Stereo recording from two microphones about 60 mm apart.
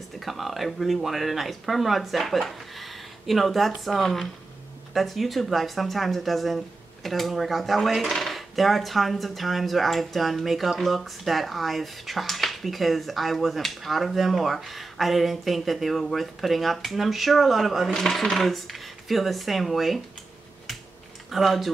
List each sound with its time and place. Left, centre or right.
0.2 s speech: centre
21.3 s speech: centre